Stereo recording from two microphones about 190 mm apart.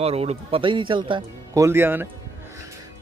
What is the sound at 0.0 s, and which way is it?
A man's voice, 30° right (ahead or behind).